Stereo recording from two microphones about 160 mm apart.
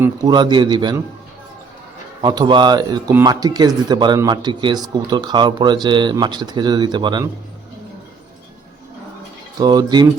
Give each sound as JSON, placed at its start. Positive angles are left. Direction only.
{"t": 0.0, "sound": "speech", "side_deg": -25}
{"t": 2.2, "sound": "speech", "side_deg": -25}
{"t": 9.6, "sound": "speech", "side_deg": -25}